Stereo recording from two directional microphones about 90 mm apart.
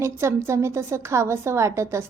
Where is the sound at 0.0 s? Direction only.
30° right (ahead or behind).